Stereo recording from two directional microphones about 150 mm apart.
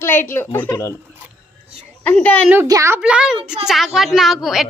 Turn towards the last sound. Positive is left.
turn(degrees=0)  # may be behind; listen again after turning